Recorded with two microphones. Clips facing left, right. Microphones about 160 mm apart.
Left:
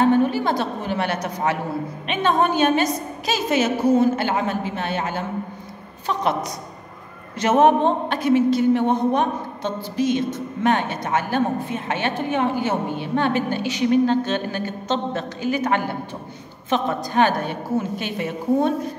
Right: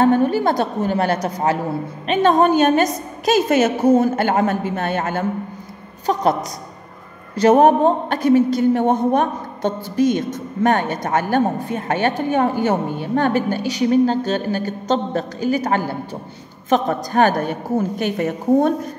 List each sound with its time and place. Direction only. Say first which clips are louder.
0.0 s a woman's voice: right 2 dB; 45° right (ahead or behind)
7.3 s a woman's voice: right 4 dB; 35° right (ahead or behind)